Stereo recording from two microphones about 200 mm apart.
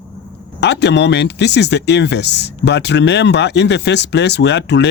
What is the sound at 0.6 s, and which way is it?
Speech, 60° left (ahead or behind).